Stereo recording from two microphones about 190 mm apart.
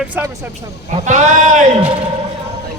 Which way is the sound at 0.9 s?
40° right (ahead or behind).